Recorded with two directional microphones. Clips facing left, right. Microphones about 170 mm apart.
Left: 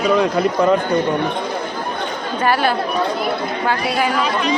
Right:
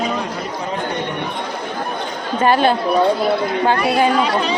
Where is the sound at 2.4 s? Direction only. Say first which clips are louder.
Right 3 dB; 25° right (ahead or behind).